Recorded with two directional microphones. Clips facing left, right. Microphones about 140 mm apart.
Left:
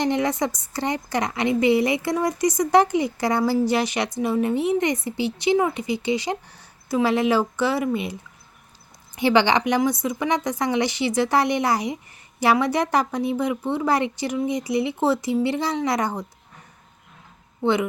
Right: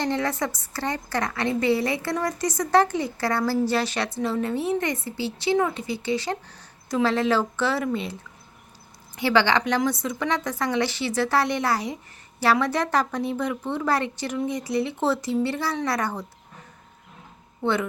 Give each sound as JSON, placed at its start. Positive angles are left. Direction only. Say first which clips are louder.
{"t": 0.0, "sound": "a woman's voice", "louder": "left 3 dB", "side_deg": 15}
{"t": 9.1, "sound": "a woman's voice", "louder": "left 2 dB", "side_deg": 20}
{"t": 17.6, "sound": "a woman's voice", "louder": "left 3 dB", "side_deg": 15}